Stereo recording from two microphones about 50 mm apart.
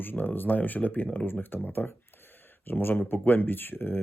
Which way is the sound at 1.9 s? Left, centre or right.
Left.